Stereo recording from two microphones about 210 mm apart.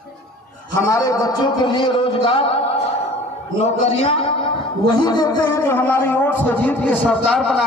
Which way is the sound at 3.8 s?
30° left (ahead or behind).